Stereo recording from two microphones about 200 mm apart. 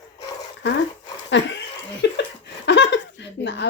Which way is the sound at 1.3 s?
60° left (ahead or behind).